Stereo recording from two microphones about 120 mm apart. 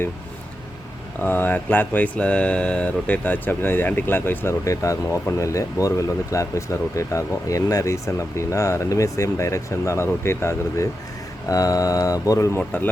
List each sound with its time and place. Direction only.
1.2 s speech: 15° left (ahead or behind)
12.5 s speech: 15° left (ahead or behind)